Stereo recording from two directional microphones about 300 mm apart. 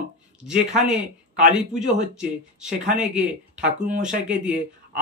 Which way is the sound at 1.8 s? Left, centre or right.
Right.